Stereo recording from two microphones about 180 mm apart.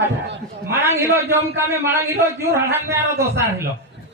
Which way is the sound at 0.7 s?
15° right (ahead or behind).